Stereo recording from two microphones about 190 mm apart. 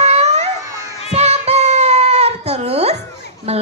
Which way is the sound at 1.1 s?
35° right (ahead or behind).